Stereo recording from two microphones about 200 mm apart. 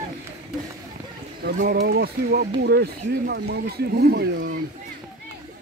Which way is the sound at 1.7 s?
55° right (ahead or behind).